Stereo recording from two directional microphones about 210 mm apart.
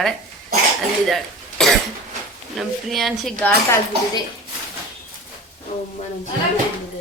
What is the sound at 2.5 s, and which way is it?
Speech, centre (ahead or behind).